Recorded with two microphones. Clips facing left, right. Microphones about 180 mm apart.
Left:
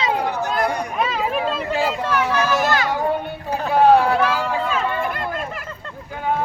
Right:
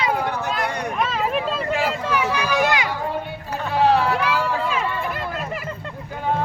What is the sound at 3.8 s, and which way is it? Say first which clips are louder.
Vehicle: left 4 dB; 50° left (ahead or behind).